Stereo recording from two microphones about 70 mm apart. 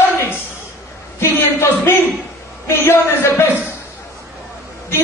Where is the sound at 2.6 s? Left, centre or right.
Left.